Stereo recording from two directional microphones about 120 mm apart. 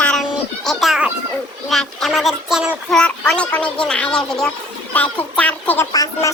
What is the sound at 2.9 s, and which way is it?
Speech, 5° left (ahead or behind).